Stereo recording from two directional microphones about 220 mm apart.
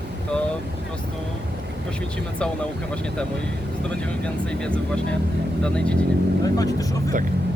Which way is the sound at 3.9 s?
5° left (ahead or behind).